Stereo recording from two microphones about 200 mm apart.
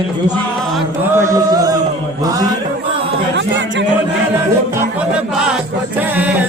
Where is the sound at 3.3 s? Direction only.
65° right (ahead or behind).